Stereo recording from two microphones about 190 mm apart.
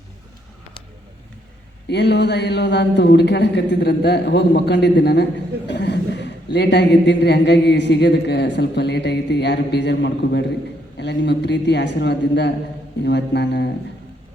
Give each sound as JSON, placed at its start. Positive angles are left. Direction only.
{"t": 1.9, "sound": "a man's voice", "side_deg": 65}